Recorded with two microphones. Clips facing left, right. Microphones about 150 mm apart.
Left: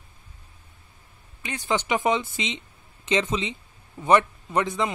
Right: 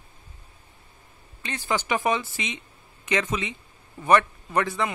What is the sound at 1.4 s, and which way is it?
Speech, 15° left (ahead or behind).